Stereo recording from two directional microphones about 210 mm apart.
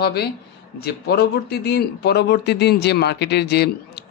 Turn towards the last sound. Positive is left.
turn(degrees=50)  # may be behind; listen again after turning